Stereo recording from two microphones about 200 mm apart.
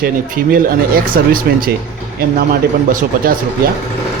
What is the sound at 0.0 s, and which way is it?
Speech, 45° right (ahead or behind).